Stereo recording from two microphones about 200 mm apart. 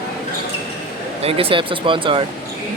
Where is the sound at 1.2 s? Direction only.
30° right (ahead or behind).